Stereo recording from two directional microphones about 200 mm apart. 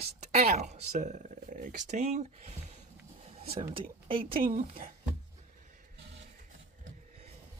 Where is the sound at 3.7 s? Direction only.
25° right (ahead or behind).